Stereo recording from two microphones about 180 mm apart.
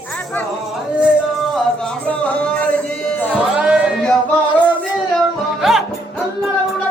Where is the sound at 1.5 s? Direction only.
5° left (ahead or behind).